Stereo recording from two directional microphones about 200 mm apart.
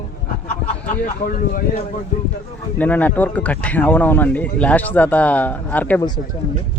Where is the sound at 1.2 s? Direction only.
45° left (ahead or behind).